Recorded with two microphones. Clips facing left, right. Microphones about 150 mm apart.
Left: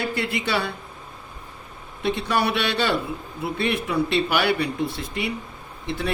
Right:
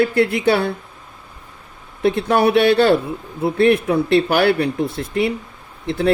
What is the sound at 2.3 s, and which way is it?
Speech, 50° right (ahead or behind).